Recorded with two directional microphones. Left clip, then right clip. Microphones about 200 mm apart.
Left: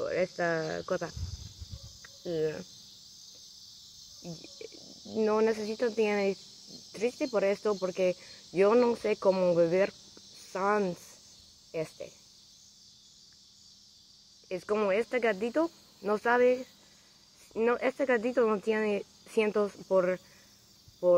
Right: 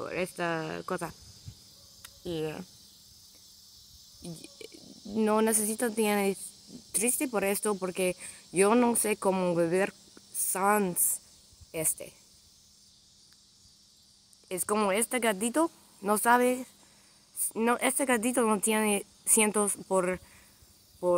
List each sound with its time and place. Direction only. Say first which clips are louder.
0.0 s speech: left 3 dB; 25° right (ahead or behind)
2.0 s cricket: left 3 dB; 15° right (ahead or behind)
5.1 s speech: even; 35° right (ahead or behind)
14.5 s speech: even; 35° right (ahead or behind)